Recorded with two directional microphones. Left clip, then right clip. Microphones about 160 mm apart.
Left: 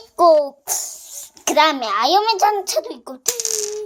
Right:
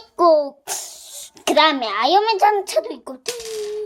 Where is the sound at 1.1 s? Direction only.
25° right (ahead or behind).